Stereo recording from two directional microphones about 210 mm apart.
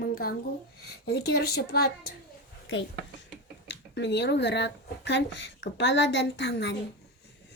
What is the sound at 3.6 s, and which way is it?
A child's voice, 55° left (ahead or behind).